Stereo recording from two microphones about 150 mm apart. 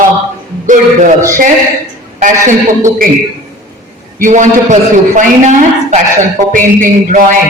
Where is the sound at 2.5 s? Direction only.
60° right (ahead or behind).